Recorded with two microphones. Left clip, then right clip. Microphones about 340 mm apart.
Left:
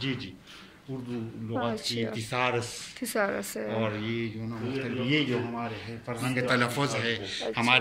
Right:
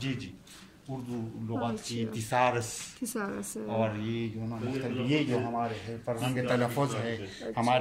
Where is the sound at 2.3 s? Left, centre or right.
Right.